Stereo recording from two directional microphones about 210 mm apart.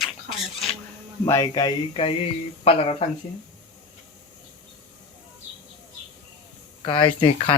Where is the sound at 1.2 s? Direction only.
15° left (ahead or behind).